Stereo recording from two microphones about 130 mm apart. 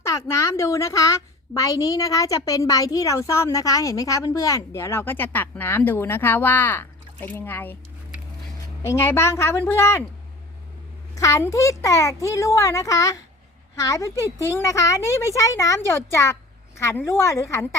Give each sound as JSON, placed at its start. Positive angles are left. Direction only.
{"t": 0.0, "sound": "a woman's voice", "side_deg": 20}
{"t": 8.8, "sound": "a woman's voice", "side_deg": 20}
{"t": 11.1, "sound": "a woman's voice", "side_deg": 25}